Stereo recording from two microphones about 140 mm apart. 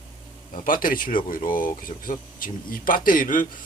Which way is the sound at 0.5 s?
80° left.